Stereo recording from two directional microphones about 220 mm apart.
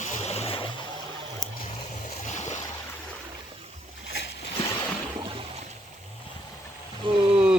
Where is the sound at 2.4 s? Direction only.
30° left (ahead or behind).